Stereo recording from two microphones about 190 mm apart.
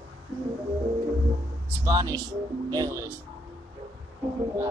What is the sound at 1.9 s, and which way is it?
Speech, 20° right (ahead or behind).